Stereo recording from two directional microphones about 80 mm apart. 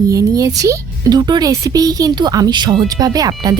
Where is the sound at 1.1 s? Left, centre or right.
Right.